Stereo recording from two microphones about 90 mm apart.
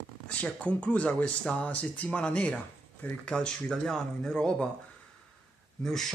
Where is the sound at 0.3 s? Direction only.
15° left (ahead or behind).